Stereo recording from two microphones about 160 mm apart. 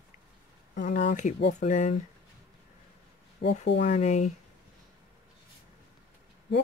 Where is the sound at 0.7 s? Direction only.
55° left (ahead or behind).